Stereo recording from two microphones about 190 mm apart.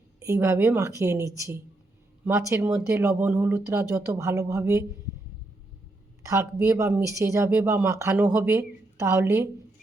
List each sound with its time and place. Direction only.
0.2 s speech: 15° right (ahead or behind)
6.2 s speech: 15° right (ahead or behind)